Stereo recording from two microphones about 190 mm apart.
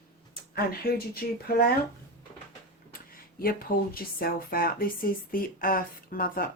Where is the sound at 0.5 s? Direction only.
50° left (ahead or behind).